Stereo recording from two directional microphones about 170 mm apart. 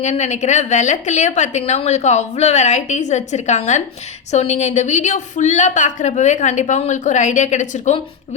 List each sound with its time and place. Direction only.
0.0 s a woman's voice: 40° left (ahead or behind)